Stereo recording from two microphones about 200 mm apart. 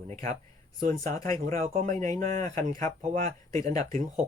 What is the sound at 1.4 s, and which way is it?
Speech, 35° right (ahead or behind).